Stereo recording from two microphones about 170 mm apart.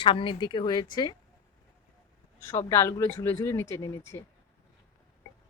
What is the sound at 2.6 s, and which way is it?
Speech, 15° left (ahead or behind).